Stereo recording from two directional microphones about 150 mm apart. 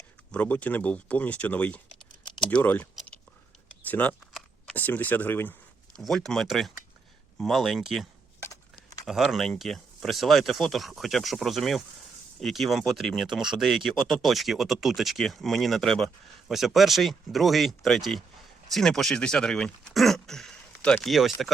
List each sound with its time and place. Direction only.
0.3 s speech: 10° left (ahead or behind)
2.9 s whispering: centre (ahead or behind)
3.8 s speech: 10° left (ahead or behind)
4.4 s camera: 5° left (ahead or behind)
6.0 s speech: 5° left (ahead or behind)
8.4 s a sound: 25° left (ahead or behind)
9.0 s speech: centre (ahead or behind)